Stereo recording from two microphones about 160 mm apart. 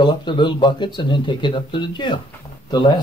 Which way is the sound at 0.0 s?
30° left (ahead or behind).